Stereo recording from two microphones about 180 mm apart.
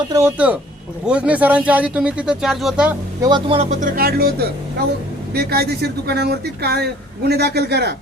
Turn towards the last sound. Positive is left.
turn(degrees=-65)  # may be behind; listen again after turning